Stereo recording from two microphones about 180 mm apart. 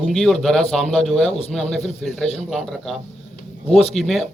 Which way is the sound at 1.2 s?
35° left (ahead or behind).